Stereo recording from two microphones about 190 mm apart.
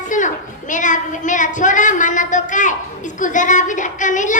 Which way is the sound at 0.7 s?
40° left (ahead or behind).